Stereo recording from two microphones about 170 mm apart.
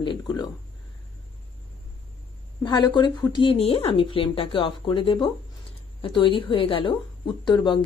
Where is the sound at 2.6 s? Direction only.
25° left (ahead or behind).